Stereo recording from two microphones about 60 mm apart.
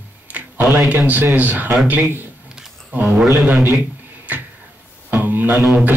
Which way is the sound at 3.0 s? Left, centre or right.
Centre.